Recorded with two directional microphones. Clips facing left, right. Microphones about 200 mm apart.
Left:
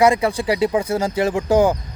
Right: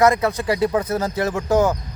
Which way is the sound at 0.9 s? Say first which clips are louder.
Left 3 dB; 30° left (ahead or behind).